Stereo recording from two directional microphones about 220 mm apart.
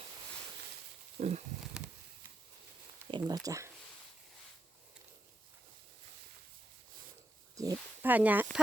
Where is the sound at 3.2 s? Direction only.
15° right (ahead or behind).